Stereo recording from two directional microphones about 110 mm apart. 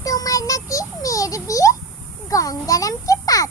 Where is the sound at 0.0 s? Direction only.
30° left (ahead or behind).